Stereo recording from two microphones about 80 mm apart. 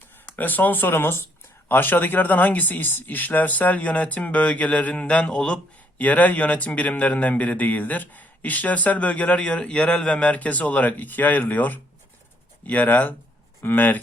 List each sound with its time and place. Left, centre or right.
0.3 s a man's voice: left